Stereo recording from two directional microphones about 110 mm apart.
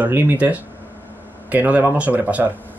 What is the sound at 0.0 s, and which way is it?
Speech, 20° right (ahead or behind).